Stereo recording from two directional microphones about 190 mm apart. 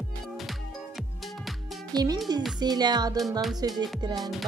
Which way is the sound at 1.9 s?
20° right (ahead or behind).